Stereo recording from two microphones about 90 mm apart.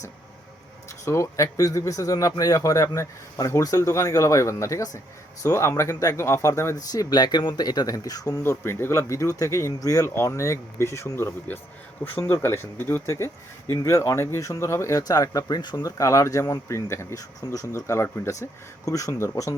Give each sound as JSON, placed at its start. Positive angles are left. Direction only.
{"t": 1.0, "sound": "speech", "side_deg": 35}
{"t": 6.7, "sound": "speech", "side_deg": 45}
{"t": 8.4, "sound": "speech", "side_deg": 25}